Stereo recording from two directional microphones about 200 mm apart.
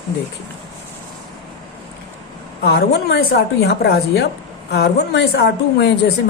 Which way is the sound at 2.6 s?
55° left (ahead or behind).